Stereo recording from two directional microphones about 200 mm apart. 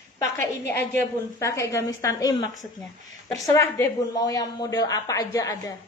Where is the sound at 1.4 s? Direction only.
15° left (ahead or behind).